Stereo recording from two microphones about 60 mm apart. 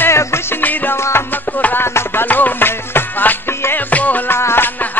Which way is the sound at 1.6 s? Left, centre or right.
Left.